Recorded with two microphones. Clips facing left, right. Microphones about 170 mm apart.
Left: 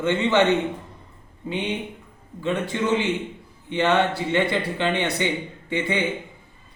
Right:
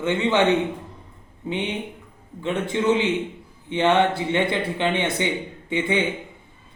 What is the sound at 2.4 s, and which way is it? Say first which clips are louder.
A man's voice: right 2 dB; 15° right (ahead or behind).